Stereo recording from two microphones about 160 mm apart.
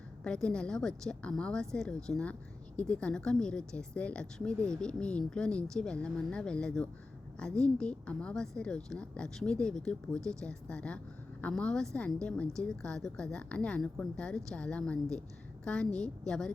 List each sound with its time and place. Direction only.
0.3 s a woman's voice: 5° left (ahead or behind)